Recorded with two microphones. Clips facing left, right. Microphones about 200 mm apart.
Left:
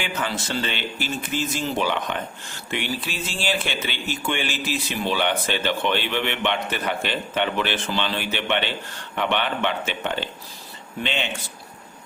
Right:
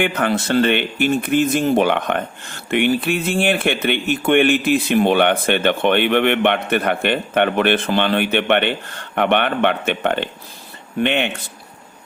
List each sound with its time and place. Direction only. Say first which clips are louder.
0.0 s speech: right 9 dB; 60° right (ahead or behind)